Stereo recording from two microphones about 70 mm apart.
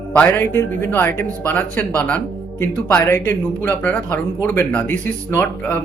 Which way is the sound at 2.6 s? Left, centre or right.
Left.